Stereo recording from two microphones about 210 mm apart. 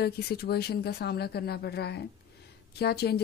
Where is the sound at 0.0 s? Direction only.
50° left (ahead or behind).